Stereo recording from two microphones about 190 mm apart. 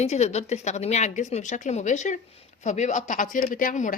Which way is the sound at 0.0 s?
35° left (ahead or behind).